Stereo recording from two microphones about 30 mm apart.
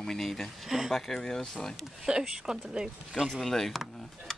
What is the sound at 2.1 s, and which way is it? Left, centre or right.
Speech, right.